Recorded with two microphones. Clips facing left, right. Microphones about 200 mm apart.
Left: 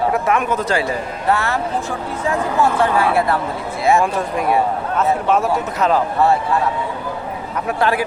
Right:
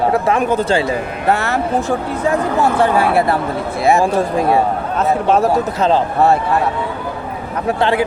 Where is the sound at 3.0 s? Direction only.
35° right (ahead or behind).